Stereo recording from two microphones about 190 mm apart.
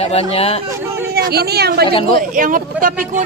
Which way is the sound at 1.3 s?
55° right (ahead or behind).